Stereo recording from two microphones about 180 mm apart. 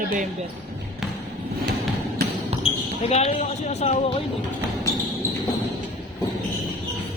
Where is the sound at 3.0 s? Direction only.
35° left (ahead or behind).